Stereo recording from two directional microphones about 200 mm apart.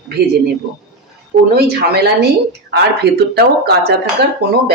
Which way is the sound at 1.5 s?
55° right (ahead or behind).